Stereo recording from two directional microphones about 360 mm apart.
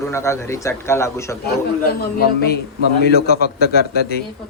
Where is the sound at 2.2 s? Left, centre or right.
Left.